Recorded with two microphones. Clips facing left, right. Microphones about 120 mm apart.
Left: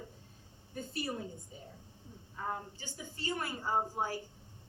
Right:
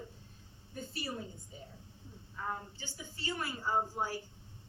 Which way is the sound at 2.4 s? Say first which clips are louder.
Left 1 dB; 50° left (ahead or behind).